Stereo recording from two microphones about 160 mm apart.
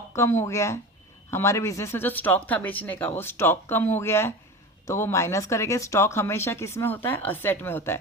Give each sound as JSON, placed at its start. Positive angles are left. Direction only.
{"t": 0.1, "sound": "speech", "side_deg": 15}